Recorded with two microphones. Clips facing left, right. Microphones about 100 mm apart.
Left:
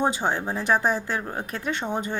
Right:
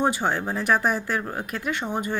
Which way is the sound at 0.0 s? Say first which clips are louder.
Right 1 dB; 15° left (ahead or behind).